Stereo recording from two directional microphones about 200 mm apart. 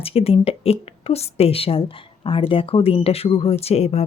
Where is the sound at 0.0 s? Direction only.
30° left (ahead or behind).